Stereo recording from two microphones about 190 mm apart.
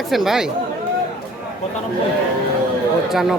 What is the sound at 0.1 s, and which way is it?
Speech, centre (ahead or behind).